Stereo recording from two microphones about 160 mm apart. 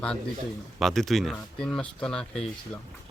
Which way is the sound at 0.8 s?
Centre (ahead or behind).